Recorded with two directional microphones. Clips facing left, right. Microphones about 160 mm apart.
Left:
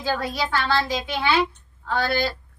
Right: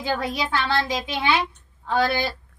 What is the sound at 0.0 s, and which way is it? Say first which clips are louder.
A woman's voice: even; 20° right (ahead or behind).